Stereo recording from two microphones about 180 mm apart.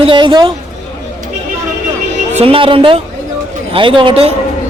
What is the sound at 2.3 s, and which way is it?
A woman's voice, 30° right (ahead or behind).